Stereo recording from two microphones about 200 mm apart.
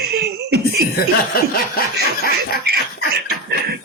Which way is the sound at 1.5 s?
50° left (ahead or behind).